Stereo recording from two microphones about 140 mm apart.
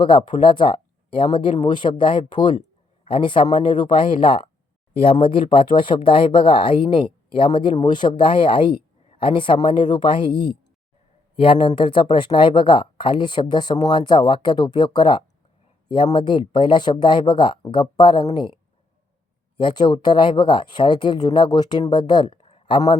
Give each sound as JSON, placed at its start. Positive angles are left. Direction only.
{"t": 0.0, "sound": "speech", "side_deg": 35}
{"t": 2.6, "sound": "a sound", "side_deg": 45}
{"t": 3.7, "sound": "speech", "side_deg": 35}
{"t": 19.5, "sound": "speech", "side_deg": 35}